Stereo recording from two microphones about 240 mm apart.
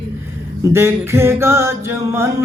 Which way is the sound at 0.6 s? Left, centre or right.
Centre.